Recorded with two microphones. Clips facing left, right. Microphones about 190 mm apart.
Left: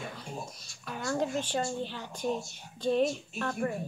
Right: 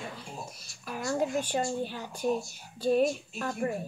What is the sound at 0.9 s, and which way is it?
A woman's voice, 10° right (ahead or behind).